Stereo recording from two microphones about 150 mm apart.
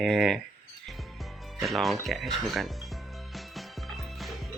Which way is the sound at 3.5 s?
Centre (ahead or behind).